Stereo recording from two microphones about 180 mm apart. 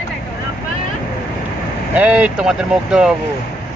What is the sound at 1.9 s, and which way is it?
Speech, 10° right (ahead or behind).